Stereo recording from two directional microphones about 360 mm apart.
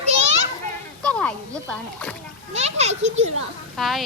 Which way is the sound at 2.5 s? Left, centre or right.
Centre.